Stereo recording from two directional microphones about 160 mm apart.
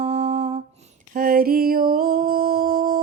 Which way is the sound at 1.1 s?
60° right (ahead or behind).